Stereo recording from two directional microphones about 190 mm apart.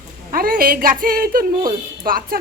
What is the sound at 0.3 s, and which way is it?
A woman's voice, 50° right (ahead or behind).